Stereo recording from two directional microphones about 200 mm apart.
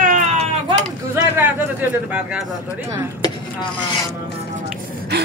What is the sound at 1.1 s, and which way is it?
Speech, 10° right (ahead or behind).